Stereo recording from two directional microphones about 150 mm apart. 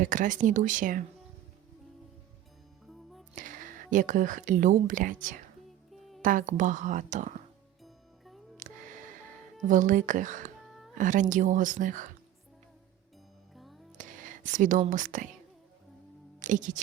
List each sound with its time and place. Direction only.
0.0 s a woman's voice: 60° right (ahead or behind)
2.8 s music: centre (ahead or behind)
3.3 s speech: 60° right (ahead or behind)
5.9 s music: centre (ahead or behind)
6.2 s a woman's voice: 60° right (ahead or behind)
7.9 s music: centre (ahead or behind)
8.6 s music: 55° right (ahead or behind)
9.6 s a woman's voice: 60° right (ahead or behind)
13.6 s music: centre (ahead or behind)
14.0 s speech: 60° right (ahead or behind)
16.4 s speech: 60° right (ahead or behind)